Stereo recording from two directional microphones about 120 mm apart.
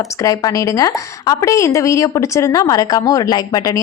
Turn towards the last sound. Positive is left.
turn(degrees=30)  # may be behind; listen again after turning